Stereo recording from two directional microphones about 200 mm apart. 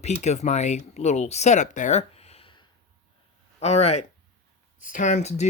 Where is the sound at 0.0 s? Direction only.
35° left (ahead or behind).